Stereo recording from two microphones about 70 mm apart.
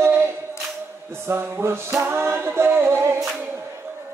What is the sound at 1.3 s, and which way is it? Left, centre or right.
A capella, right.